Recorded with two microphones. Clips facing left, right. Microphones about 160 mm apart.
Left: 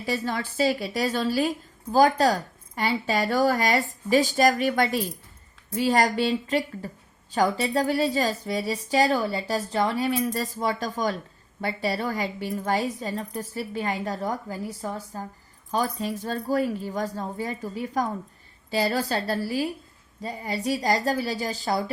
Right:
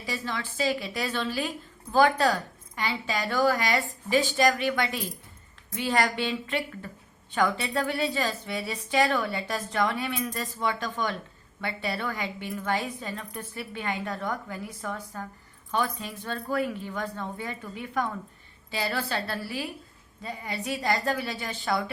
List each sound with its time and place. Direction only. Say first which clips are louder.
0.0 s a woman's voice: left 5 dB; 45° left (ahead or behind)